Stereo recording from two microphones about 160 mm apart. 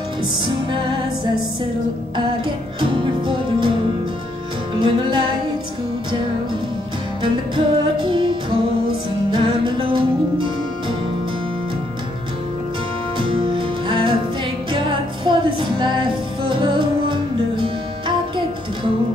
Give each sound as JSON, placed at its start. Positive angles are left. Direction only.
{"t": 0.7, "sound": "music", "side_deg": -30}
{"t": 2.8, "sound": "music", "side_deg": -30}
{"t": 4.7, "sound": "music", "side_deg": -30}
{"t": 7.5, "sound": "music", "side_deg": -30}
{"t": 13.2, "sound": "music", "side_deg": -35}